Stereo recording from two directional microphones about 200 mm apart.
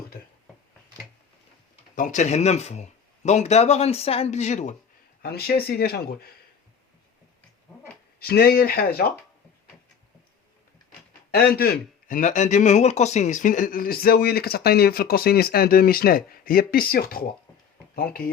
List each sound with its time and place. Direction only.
2.0 s speech: 40° left (ahead or behind)
5.2 s speech: 50° left (ahead or behind)
8.2 s speech: 50° left (ahead or behind)
11.3 s speech: 50° left (ahead or behind)